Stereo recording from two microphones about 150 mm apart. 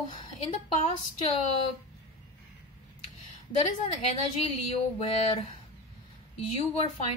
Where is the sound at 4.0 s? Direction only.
40° left (ahead or behind).